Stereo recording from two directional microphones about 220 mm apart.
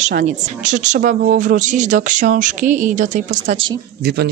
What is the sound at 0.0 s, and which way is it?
Speech, 35° right (ahead or behind).